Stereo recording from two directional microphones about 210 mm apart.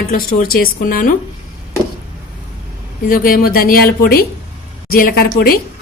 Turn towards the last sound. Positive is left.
turn(degrees=45)  # may be behind; listen again after turning